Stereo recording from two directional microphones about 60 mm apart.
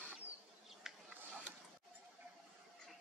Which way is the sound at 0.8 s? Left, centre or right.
Centre.